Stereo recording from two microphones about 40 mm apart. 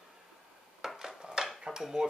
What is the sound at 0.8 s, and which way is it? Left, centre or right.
Dishes, centre.